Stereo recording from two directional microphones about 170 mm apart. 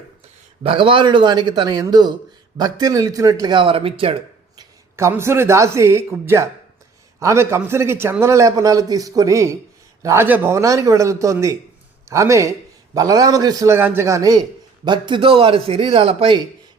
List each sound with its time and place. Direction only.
0.6 s a man's voice: 30° right (ahead or behind)
4.9 s a man's voice: 15° right (ahead or behind); by 16.4 s 35° right (ahead or behind)